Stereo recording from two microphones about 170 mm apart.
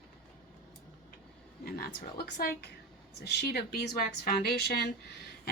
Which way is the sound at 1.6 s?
65° left (ahead or behind).